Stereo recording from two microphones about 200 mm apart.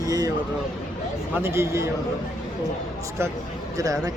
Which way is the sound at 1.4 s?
15° right (ahead or behind).